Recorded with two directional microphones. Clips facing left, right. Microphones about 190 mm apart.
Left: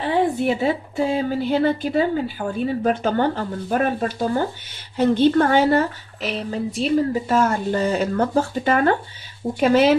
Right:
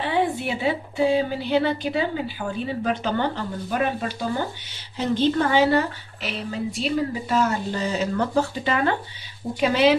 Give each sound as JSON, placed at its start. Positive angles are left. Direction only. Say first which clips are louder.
{"t": 0.0, "sound": "speech", "louder": "left 4 dB", "side_deg": 45}